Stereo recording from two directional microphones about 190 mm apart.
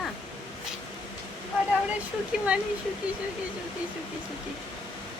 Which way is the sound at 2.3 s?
5° right (ahead or behind).